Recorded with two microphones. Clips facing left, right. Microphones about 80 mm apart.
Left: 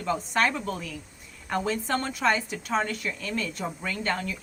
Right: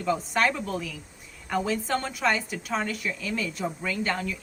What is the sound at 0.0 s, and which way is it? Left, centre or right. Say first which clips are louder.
A woman's voice: right 1 dB; centre.